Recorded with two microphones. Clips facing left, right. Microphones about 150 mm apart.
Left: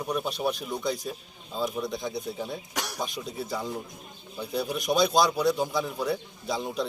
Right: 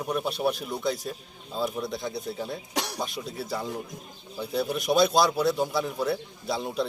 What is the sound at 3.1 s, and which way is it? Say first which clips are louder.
Speech: even; centre (ahead or behind).